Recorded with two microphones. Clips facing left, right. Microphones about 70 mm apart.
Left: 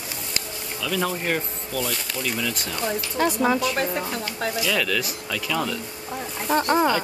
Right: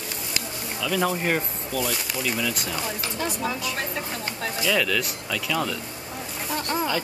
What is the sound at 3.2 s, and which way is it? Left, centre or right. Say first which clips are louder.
Speech: left 9 dB; left.